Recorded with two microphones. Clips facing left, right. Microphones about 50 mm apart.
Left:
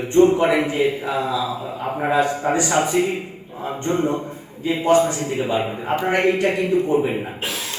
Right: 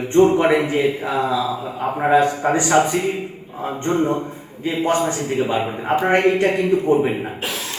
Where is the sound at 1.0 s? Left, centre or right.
Right.